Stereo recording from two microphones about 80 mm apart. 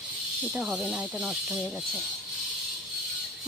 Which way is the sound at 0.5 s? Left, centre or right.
Centre.